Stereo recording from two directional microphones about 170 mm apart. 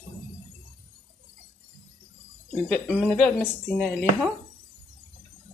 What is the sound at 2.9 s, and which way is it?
Speech, 5° left (ahead or behind).